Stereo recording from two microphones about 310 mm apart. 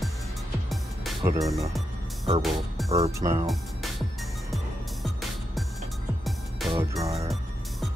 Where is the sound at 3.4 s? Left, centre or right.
Centre.